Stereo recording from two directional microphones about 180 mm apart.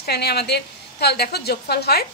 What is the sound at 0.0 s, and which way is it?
A woman's voice, 65° left (ahead or behind).